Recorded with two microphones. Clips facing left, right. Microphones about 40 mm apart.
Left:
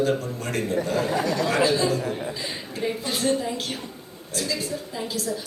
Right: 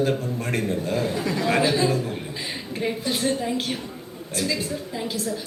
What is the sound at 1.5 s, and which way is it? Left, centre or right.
Speech, right.